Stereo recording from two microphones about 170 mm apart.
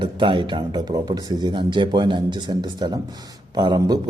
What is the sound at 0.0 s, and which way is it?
A man's voice, 30° right (ahead or behind).